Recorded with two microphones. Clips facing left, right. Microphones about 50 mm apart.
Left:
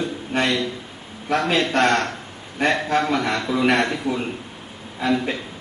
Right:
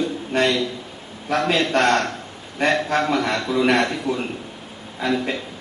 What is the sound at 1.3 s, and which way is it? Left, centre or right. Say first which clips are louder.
A man's voice: even; centre.